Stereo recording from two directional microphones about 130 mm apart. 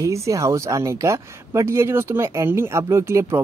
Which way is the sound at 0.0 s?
25° right (ahead or behind).